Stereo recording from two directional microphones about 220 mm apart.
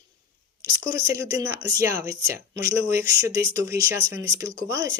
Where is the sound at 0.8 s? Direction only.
15° right (ahead or behind).